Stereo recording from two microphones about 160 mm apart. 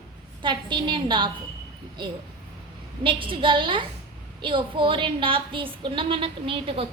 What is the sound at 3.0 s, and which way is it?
A woman's voice, 30° right (ahead or behind).